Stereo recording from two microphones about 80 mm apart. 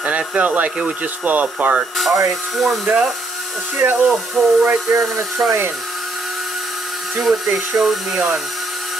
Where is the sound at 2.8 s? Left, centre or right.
Centre.